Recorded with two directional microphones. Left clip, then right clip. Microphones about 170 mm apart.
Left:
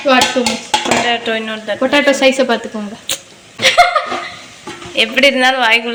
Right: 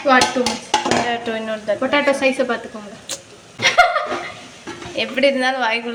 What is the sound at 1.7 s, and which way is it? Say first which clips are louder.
Speech: left 6 dB; 50° left (ahead or behind).